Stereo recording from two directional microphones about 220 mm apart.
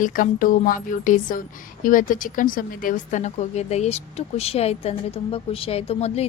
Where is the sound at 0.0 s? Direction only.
40° left (ahead or behind).